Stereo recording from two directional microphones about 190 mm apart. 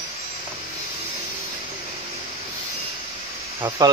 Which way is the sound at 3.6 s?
20° right (ahead or behind).